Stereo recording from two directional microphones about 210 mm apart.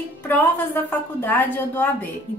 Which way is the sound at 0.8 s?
10° left (ahead or behind).